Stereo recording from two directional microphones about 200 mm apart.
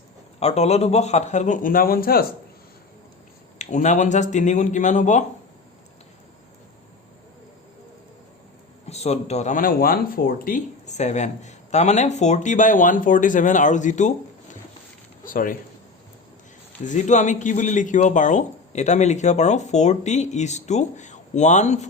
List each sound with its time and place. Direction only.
0.3 s speech: 30° left (ahead or behind); by 2.2 s 45° left (ahead or behind)
3.6 s speech: 35° left (ahead or behind)
8.9 s speech: 30° left (ahead or behind)
16.8 s speech: 35° left (ahead or behind)